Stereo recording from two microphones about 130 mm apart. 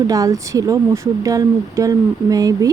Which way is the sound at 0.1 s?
25° right (ahead or behind).